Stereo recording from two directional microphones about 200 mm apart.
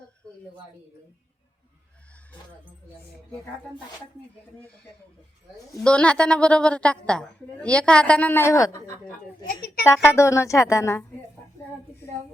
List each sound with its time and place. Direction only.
5.7 s a woman's voice: 5° left (ahead or behind)
9.5 s a woman's voice: 50° left (ahead or behind)
9.8 s a woman's voice: 10° left (ahead or behind)